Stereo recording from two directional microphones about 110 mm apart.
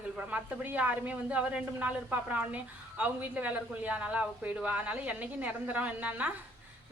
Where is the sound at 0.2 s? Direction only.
15° right (ahead or behind).